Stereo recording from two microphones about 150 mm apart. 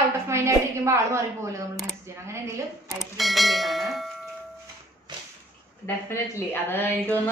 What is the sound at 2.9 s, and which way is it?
Speech, centre (ahead or behind).